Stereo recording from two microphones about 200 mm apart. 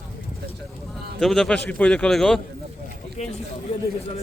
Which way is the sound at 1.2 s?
Centre (ahead or behind).